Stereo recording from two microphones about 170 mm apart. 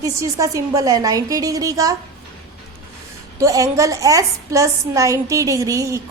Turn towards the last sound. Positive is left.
turn(degrees=-20)  # may be behind; listen again after turning